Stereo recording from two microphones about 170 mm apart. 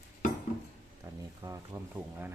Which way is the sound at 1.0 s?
15° right (ahead or behind).